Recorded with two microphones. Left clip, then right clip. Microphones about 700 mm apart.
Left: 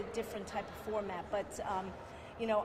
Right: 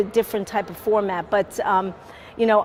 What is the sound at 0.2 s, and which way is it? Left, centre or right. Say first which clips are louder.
Speech: right 16 dB; right.